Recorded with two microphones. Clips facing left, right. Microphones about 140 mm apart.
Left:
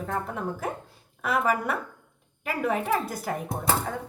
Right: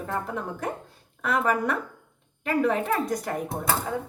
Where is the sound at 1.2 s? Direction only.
5° left (ahead or behind).